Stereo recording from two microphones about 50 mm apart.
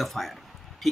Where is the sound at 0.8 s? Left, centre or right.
Centre.